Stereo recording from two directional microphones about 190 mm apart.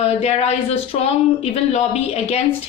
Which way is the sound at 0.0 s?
35° left (ahead or behind).